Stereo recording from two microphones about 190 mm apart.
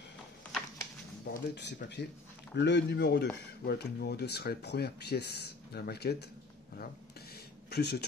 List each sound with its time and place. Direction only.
1.2 s speech: 65° left (ahead or behind)
7.7 s speech: 55° left (ahead or behind)